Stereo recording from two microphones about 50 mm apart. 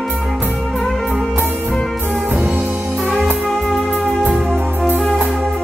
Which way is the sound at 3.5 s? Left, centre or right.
Centre.